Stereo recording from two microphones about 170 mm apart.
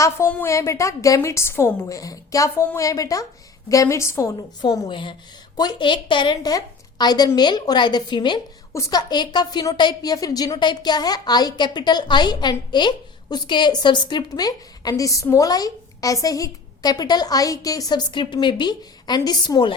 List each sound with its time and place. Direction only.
0.0 s a woman's voice: 15° left (ahead or behind)